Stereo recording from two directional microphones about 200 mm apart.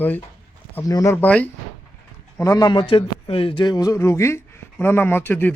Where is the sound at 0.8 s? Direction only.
15° left (ahead or behind).